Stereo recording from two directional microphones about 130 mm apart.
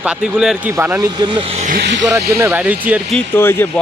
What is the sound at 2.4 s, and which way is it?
Speech, 15° right (ahead or behind).